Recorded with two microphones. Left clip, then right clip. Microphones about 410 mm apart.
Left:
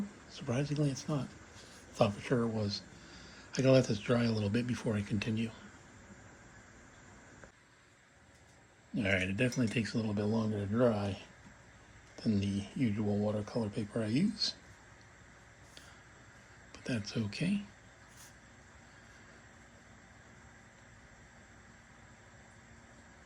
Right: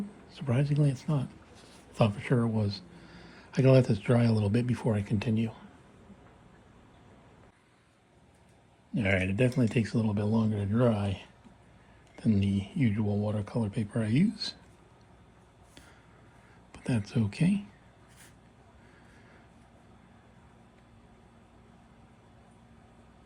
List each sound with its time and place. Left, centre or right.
0.3 s speech: centre
9.0 s speech: centre
12.1 s speech: centre
16.7 s speech: centre